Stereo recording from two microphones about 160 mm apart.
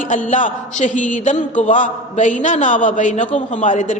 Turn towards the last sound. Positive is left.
turn(degrees=50)  # may be behind; listen again after turning